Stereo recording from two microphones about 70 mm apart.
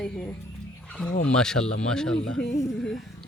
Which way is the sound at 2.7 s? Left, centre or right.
Centre.